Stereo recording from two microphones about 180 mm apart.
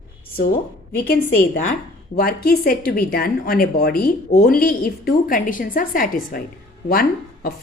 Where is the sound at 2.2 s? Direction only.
55° left (ahead or behind).